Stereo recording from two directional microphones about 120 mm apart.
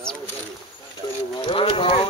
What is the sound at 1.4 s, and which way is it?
Speech, 45° left (ahead or behind).